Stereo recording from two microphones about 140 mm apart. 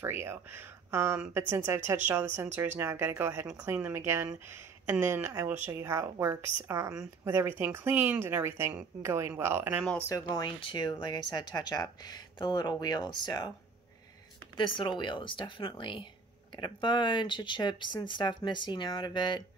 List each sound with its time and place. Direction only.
0.0 s a woman's voice: 20° right (ahead or behind)
10.0 s speech: 25° left (ahead or behind)
14.8 s speech: 35° left (ahead or behind)